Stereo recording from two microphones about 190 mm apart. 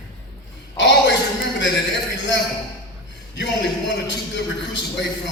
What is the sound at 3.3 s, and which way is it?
A man's voice, 65° left (ahead or behind).